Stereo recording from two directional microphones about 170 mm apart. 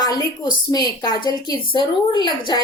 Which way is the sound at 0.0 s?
25° left (ahead or behind).